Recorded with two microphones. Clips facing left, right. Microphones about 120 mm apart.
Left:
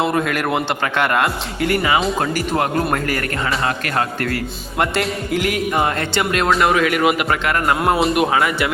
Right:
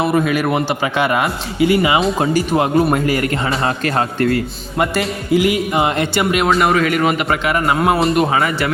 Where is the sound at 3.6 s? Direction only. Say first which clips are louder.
Right 3 dB; 30° right (ahead or behind).